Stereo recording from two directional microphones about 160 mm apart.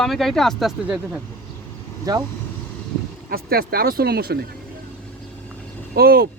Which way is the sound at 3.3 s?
70° right (ahead or behind).